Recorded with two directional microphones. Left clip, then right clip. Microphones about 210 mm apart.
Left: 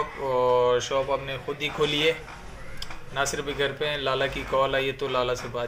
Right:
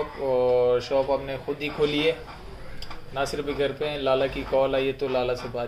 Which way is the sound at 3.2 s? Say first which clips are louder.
Even; centre (ahead or behind).